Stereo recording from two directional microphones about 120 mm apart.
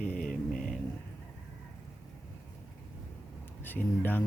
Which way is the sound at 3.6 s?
15° left (ahead or behind).